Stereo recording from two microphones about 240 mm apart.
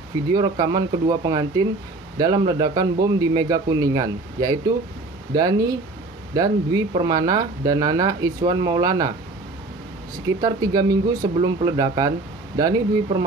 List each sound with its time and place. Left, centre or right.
0.3 s a man's voice: centre
10.4 s a man's voice: centre